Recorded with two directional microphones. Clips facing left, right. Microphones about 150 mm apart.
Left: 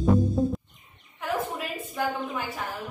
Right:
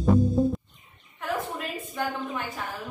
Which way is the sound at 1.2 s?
5° left (ahead or behind).